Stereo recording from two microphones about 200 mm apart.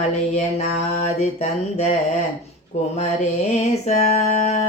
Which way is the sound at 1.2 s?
35° left (ahead or behind).